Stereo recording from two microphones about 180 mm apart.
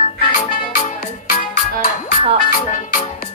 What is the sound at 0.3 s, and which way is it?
Music, 45° left (ahead or behind).